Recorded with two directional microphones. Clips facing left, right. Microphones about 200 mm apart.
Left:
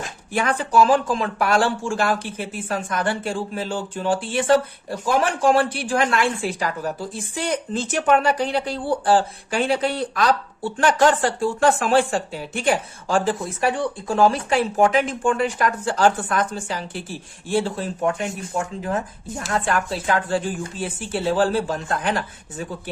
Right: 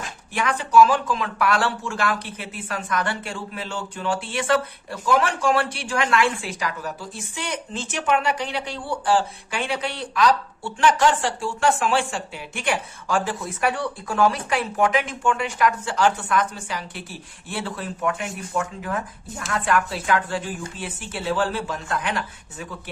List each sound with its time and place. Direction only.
0.0 s a woman's voice: 35° left (ahead or behind)